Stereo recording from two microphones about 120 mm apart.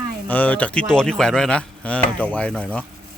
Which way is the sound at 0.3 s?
15° left (ahead or behind).